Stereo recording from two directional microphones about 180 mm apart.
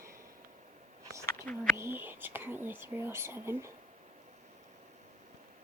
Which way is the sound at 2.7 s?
10° right (ahead or behind).